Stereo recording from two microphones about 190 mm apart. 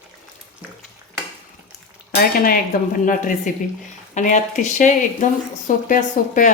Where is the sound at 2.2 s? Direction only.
50° left (ahead or behind).